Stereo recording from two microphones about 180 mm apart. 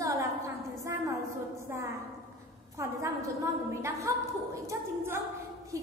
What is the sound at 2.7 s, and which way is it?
A woman's voice, 15° right (ahead or behind).